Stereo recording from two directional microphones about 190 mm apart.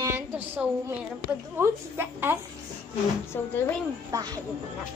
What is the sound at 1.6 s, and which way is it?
Speech, 10° right (ahead or behind).